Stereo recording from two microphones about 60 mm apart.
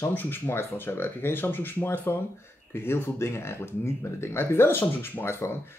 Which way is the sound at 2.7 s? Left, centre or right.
Left.